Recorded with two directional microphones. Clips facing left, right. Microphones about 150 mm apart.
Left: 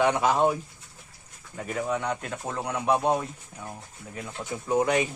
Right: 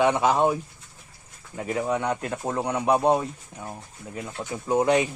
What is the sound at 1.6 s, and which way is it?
Speech, 20° right (ahead or behind).